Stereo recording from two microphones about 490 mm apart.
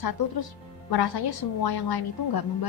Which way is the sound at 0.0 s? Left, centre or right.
Left.